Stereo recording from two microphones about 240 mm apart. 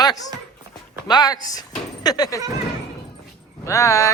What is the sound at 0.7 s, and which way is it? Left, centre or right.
Clip-clop, centre.